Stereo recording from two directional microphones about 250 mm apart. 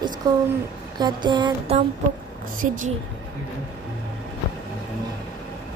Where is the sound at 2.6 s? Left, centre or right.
Right.